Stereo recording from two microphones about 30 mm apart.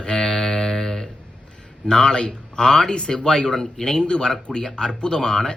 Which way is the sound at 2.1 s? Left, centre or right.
Left.